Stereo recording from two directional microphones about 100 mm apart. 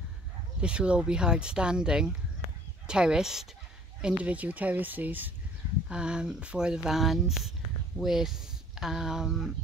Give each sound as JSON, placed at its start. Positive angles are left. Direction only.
{"t": 0.6, "sound": "speech", "side_deg": -10}